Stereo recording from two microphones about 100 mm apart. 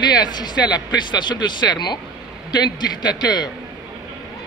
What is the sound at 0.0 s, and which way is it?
Speech, 45° left (ahead or behind).